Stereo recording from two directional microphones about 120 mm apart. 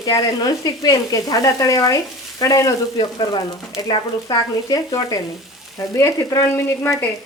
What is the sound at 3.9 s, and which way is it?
Frying, 35° left (ahead or behind).